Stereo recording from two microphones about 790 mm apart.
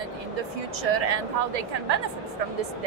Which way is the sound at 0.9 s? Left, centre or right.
Right.